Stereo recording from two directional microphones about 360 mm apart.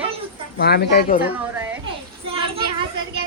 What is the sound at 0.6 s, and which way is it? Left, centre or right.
Speech, left.